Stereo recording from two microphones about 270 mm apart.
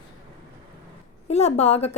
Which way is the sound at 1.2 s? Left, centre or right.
Left.